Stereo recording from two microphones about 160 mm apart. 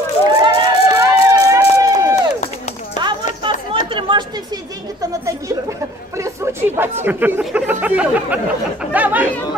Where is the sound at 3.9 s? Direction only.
30° right (ahead or behind).